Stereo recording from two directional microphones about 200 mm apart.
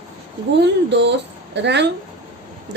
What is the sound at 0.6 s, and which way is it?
A woman's voice, 60° right (ahead or behind).